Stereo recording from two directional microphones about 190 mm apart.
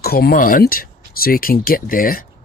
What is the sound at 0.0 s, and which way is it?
Speech, 55° left (ahead or behind).